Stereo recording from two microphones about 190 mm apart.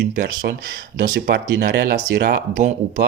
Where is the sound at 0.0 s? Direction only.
60° right (ahead or behind).